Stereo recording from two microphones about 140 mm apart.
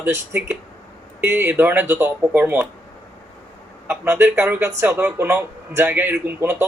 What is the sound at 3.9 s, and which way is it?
A man's voice, 15° right (ahead or behind).